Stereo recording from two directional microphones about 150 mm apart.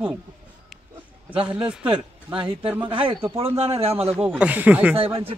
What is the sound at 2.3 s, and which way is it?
Speech, 35° right (ahead or behind).